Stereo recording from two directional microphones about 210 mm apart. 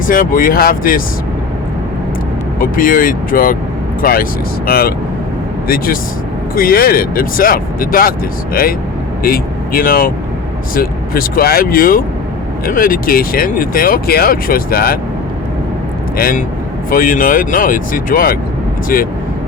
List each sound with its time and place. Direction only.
0.1 s speech: 40° left (ahead or behind)
2.6 s speech: 40° left (ahead or behind)
9.2 s speech: 45° left (ahead or behind)
16.1 s speech: 45° left (ahead or behind)